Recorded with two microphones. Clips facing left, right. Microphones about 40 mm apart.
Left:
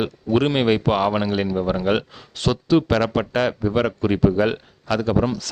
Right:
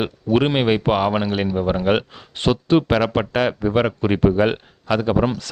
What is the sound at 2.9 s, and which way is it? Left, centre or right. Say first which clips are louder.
Speech: right 1 dB; centre.